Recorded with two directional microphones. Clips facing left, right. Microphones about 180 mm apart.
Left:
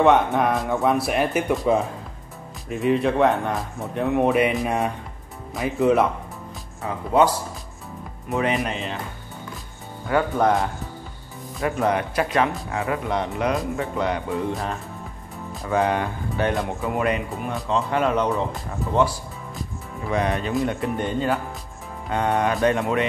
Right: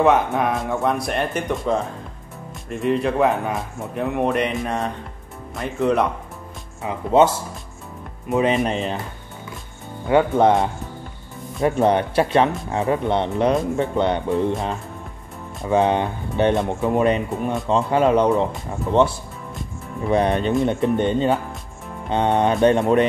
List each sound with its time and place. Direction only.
0.0 s speech: centre (ahead or behind)
6.8 s speech: 20° right (ahead or behind)
8.6 s speech: 40° right (ahead or behind)
10.0 s speech: 25° right (ahead or behind)
15.6 s speech: 25° right (ahead or behind)